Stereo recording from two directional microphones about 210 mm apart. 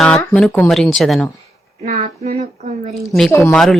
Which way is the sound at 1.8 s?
40° right (ahead or behind).